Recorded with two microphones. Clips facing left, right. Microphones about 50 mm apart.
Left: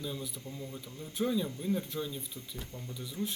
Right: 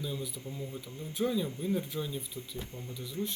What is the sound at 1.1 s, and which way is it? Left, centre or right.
Speech, centre.